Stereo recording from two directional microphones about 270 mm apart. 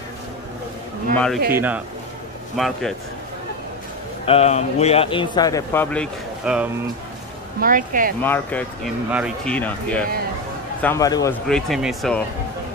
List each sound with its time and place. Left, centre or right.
1.1 s a man's voice: centre
4.3 s speech: left; by 6.7 s centre
7.6 s speech: right
8.2 s speech: centre
11.4 s speech: centre